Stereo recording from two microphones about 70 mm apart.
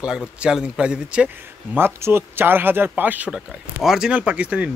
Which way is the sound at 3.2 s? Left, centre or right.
Centre.